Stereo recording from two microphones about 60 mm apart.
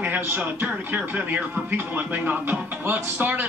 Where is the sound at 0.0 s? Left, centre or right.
Right.